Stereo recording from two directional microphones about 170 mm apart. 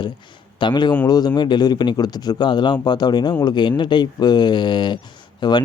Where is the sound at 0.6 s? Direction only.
25° left (ahead or behind).